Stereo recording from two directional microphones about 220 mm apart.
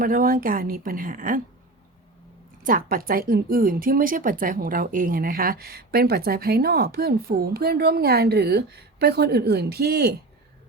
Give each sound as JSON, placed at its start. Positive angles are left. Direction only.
{"t": 0.0, "sound": "speech", "side_deg": -40}
{"t": 2.6, "sound": "a woman's voice", "side_deg": -40}